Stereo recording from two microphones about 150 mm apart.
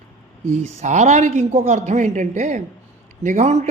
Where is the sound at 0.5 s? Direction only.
50° right (ahead or behind).